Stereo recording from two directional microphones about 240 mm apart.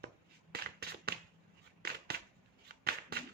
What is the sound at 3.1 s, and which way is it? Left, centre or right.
Clapping, right.